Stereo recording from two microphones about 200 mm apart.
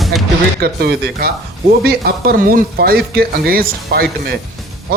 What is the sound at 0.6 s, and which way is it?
Speech, 50° right (ahead or behind).